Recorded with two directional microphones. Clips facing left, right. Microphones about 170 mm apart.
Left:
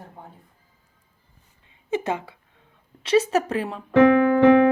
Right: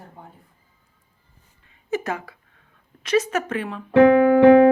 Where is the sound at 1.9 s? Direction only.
25° left (ahead or behind).